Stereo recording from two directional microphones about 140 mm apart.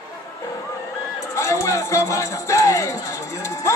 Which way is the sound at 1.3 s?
20° left (ahead or behind).